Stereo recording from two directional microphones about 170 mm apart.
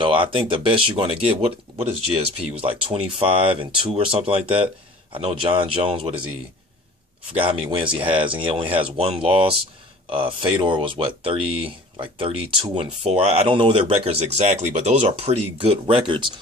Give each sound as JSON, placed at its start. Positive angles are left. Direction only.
{"t": 0.0, "sound": "speech", "side_deg": -30}
{"t": 7.3, "sound": "speech", "side_deg": -30}